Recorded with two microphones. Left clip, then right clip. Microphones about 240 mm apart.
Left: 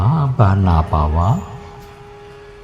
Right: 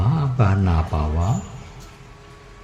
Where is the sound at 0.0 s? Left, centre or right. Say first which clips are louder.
Left 6 dB; centre.